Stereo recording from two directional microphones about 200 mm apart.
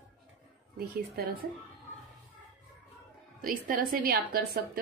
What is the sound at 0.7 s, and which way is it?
Speech, 50° right (ahead or behind).